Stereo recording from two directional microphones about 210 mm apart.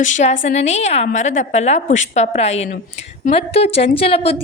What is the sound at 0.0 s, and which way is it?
A woman's voice, 35° left (ahead or behind).